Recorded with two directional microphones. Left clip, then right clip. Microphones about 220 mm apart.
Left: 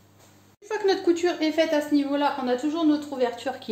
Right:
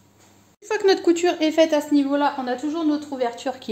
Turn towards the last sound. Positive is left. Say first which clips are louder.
# right 1 dB
turn(degrees=-30)  # may be behind; listen again after turning